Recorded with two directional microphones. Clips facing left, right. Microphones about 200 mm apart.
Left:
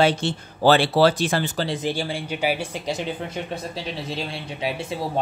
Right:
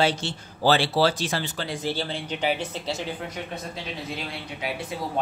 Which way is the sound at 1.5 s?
30° left (ahead or behind).